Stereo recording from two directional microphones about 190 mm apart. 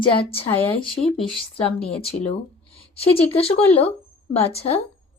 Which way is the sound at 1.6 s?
30° left (ahead or behind).